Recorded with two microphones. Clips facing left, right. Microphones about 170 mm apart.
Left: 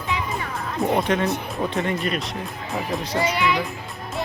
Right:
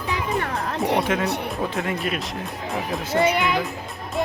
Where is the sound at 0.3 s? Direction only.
70° right (ahead or behind).